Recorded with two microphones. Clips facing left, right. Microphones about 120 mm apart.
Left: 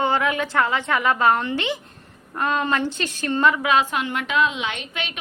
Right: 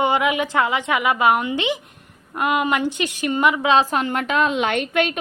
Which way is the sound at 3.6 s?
35° right (ahead or behind).